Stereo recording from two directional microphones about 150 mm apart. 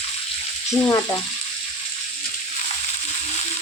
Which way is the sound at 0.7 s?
15° left (ahead or behind).